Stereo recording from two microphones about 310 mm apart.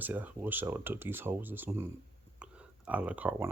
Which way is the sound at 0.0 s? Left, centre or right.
Centre.